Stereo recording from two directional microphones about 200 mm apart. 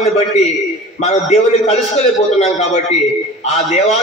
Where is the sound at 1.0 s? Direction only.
35° left (ahead or behind).